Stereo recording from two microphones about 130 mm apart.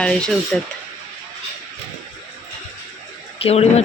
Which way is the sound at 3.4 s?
55° left (ahead or behind).